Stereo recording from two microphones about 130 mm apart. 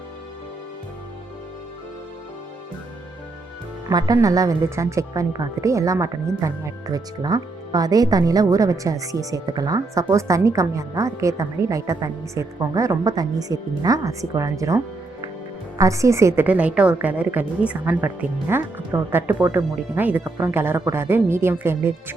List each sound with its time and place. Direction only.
3.8 s speech: 30° right (ahead or behind)
15.8 s a woman's voice: 25° right (ahead or behind)